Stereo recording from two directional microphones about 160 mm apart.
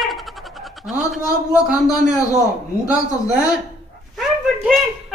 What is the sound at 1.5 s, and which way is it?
Speech, 5° right (ahead or behind).